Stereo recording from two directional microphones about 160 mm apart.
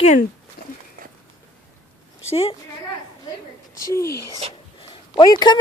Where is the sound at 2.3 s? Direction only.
35° left (ahead or behind).